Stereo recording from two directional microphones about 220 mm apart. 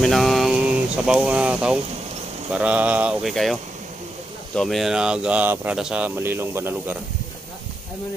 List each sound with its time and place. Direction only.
0.0 s a sound: centre (ahead or behind)
2.5 s speech: 5° right (ahead or behind)
4.6 s speech: centre (ahead or behind)